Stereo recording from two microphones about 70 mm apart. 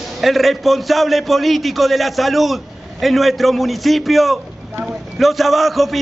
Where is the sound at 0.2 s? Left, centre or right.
Centre.